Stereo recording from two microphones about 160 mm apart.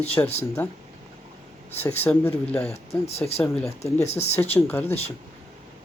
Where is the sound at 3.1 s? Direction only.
40° left (ahead or behind).